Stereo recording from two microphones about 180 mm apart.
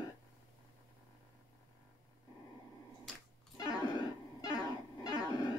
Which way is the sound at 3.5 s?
20° left (ahead or behind).